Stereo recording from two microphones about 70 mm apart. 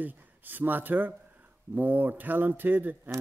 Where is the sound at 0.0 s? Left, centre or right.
Right.